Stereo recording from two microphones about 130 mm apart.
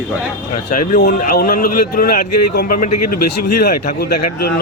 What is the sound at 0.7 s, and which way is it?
A man's voice, 85° left.